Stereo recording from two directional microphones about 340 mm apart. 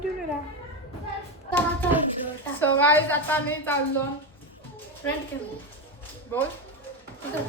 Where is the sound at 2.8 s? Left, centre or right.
Centre.